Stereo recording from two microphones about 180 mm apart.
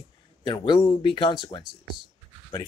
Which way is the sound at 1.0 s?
25° left (ahead or behind).